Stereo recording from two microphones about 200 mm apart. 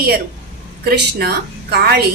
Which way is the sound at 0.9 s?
55° right (ahead or behind).